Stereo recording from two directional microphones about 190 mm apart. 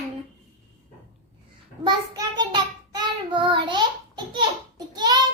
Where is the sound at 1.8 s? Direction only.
20° right (ahead or behind).